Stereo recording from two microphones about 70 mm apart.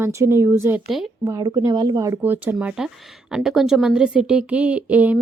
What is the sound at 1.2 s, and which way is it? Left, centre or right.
Speech, right.